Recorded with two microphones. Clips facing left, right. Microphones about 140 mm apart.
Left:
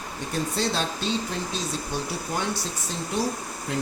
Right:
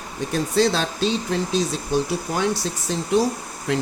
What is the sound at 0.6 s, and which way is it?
Speech, 90° right.